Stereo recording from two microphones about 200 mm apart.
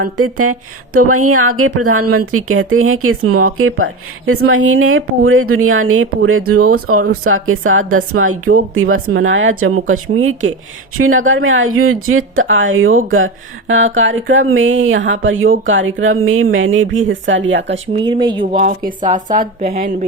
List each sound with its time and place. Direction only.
1.0 s speech: 90° right; by 17.7 s 65° right (ahead or behind)
18.0 s speech: 25° right (ahead or behind)
18.6 s speech: 40° right (ahead or behind)